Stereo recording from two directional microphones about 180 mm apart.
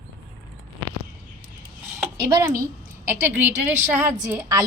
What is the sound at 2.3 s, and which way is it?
A woman's voice, 20° right (ahead or behind).